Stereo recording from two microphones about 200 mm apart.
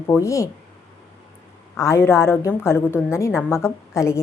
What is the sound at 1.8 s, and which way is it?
A woman's voice, 15° left (ahead or behind).